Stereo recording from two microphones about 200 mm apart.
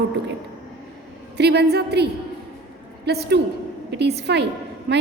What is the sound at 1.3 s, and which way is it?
A woman's voice, 55° right (ahead or behind).